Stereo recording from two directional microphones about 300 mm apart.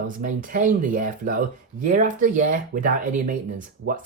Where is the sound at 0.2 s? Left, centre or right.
Right.